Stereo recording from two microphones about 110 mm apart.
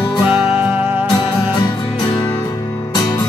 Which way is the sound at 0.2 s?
20° right (ahead or behind).